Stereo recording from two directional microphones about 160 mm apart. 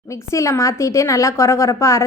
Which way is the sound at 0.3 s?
20° left (ahead or behind).